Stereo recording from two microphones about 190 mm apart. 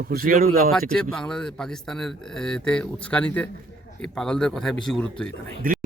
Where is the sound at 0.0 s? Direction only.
50° right (ahead or behind).